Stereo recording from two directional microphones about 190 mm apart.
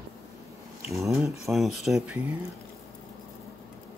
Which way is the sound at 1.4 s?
Centre (ahead or behind).